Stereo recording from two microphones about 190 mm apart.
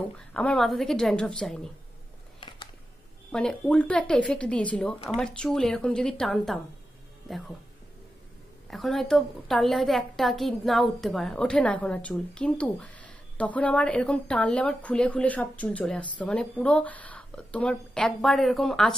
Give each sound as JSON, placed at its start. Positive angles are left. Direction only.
{"t": 0.3, "sound": "a woman's voice", "side_deg": 5}
{"t": 2.4, "sound": "a sound", "side_deg": 25}
{"t": 3.3, "sound": "a woman's voice", "side_deg": 5}
{"t": 8.6, "sound": "a woman's voice", "side_deg": 0}